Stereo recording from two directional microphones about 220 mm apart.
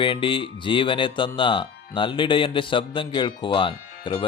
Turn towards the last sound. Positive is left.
turn(degrees=20)  # may be behind; listen again after turning